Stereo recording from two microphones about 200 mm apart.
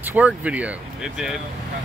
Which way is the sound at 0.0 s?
10° right (ahead or behind).